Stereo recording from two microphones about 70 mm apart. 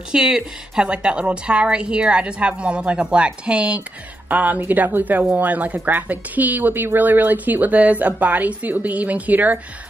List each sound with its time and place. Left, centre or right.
0.1 s a woman's voice: centre